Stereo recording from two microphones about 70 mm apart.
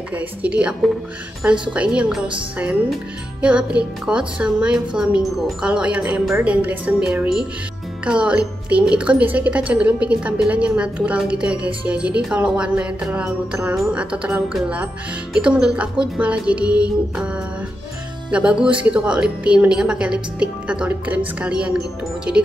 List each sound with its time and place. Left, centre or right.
0.1 s a woman's voice: centre
6.9 s speech: centre
18.3 s speech: centre